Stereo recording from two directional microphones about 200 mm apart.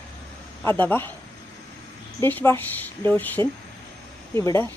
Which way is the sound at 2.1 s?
10° left (ahead or behind).